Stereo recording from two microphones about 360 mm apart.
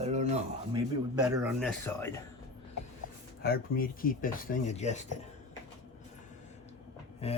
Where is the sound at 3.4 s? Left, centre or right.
Left.